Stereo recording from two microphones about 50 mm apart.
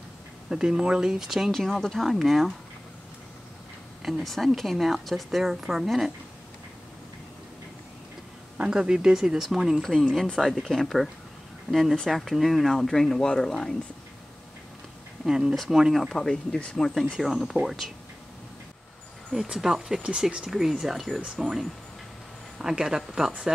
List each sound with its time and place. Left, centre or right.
0.5 s speech: centre
1.5 s a woman's voice: centre
4.0 s a woman's voice: centre
8.5 s a woman's voice: centre
15.2 s a woman's voice: centre
16.1 s speech: centre
17.2 s a woman's voice: centre
19.5 s speech: centre
20.0 s speech: right
20.4 s a woman's voice: centre